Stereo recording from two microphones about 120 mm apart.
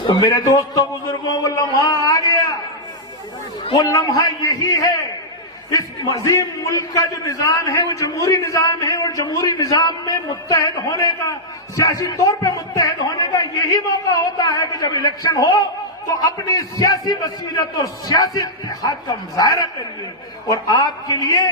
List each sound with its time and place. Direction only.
0.1 s a sound: 40° left (ahead or behind)
0.4 s speech: 30° left (ahead or behind)
3.8 s a man's voice: 30° left (ahead or behind)